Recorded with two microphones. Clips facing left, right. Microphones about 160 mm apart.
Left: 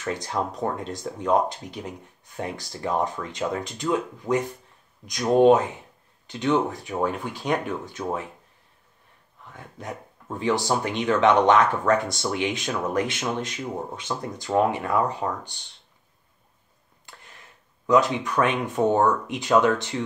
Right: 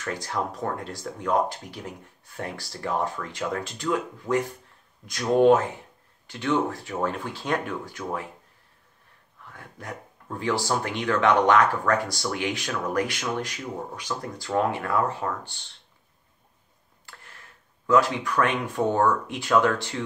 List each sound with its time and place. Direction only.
0.0 s speech: 20° left (ahead or behind)
9.5 s speech: 20° left (ahead or behind)
17.0 s speech: 20° left (ahead or behind)